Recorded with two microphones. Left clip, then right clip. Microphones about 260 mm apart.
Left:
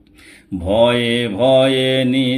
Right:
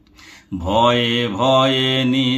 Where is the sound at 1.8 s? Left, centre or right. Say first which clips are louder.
Left 2 dB; right.